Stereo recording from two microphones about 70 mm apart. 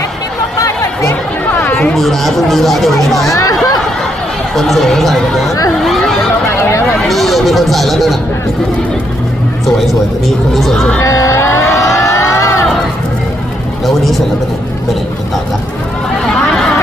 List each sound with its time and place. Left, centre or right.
0.6 s chatter: left
1.7 s a sound: centre
2.0 s speech: centre
4.5 s speech: centre
5.8 s chatter: centre
6.6 s a sound: left
7.0 s speech: centre
9.6 s speech: centre
11.0 s a sound: left
13.8 s speech: centre